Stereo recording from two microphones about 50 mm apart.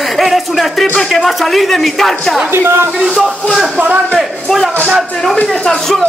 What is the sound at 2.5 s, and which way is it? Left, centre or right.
Speech, right.